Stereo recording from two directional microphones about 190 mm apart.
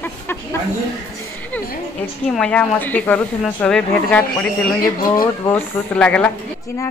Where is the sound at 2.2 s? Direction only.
5° left (ahead or behind).